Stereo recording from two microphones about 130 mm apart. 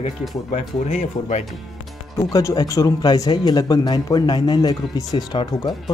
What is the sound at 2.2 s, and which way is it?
A man's voice, 25° left (ahead or behind).